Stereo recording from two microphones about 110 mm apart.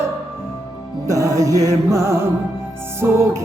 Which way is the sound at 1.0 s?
30° right (ahead or behind).